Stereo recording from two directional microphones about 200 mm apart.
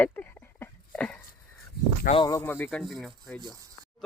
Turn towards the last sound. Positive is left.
turn(degrees=0)  # may be behind; listen again after turning